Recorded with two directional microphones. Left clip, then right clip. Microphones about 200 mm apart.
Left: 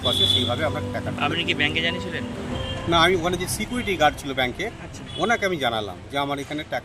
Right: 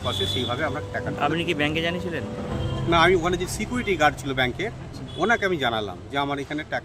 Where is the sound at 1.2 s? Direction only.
40° right (ahead or behind).